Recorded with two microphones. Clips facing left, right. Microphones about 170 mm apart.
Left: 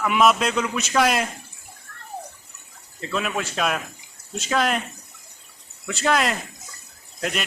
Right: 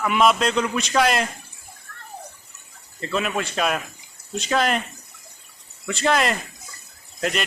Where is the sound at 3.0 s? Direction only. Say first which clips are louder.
Right 2 dB; centre (ahead or behind).